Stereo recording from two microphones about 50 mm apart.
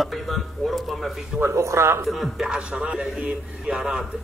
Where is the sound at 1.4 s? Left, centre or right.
Right.